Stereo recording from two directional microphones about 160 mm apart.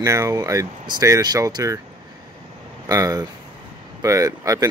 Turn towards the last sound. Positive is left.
turn(degrees=-20)  # may be behind; listen again after turning